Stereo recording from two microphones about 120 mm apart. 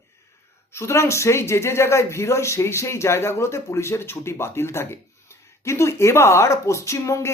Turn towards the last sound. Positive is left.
turn(degrees=25)  # may be behind; listen again after turning